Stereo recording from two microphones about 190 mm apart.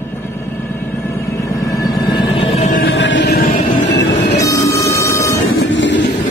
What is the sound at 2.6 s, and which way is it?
Music, 45° left (ahead or behind).